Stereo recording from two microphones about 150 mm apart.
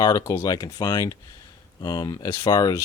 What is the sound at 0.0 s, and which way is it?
Speech, 25° left (ahead or behind).